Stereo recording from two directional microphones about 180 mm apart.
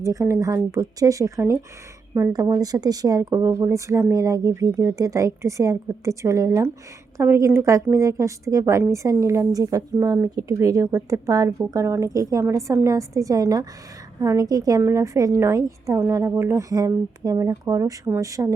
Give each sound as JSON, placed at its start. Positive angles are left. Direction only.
{"t": 0.0, "sound": "a woman's voice", "side_deg": -15}